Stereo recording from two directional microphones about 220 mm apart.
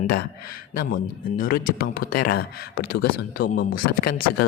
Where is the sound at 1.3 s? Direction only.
40° left (ahead or behind).